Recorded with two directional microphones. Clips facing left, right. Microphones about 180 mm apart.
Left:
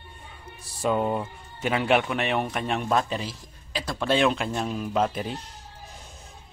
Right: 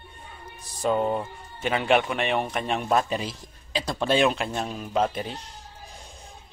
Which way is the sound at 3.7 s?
20° right (ahead or behind).